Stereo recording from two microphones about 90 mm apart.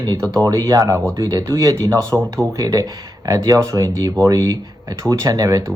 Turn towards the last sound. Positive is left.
turn(degrees=-35)  # may be behind; listen again after turning